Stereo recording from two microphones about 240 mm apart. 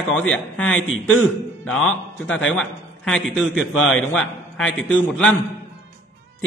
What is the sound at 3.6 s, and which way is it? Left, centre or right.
Speech, left.